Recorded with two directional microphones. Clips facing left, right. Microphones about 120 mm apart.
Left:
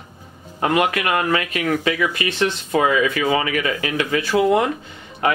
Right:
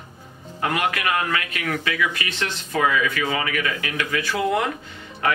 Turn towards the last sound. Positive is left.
turn(degrees=25)  # may be behind; listen again after turning